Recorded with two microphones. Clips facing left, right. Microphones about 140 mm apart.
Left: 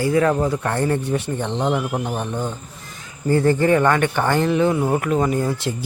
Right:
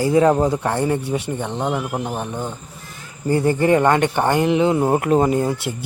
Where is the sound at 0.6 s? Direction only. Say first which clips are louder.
Right 1 dB; 15° right (ahead or behind).